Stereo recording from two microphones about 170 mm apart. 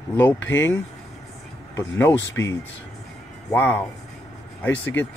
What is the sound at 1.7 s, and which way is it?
Speech, 15° left (ahead or behind).